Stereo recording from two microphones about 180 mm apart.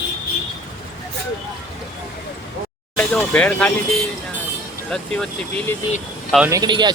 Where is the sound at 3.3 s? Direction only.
5° left (ahead or behind).